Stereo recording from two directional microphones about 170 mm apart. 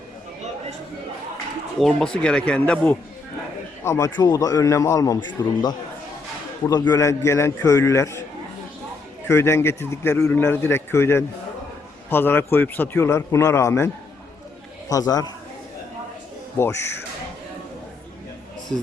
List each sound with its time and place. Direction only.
1.8 s a man's voice: 5° left (ahead or behind)
6.7 s a man's voice: 20° left (ahead or behind)
9.2 s a man's voice: 15° left (ahead or behind)
16.6 s a man's voice: 15° left (ahead or behind)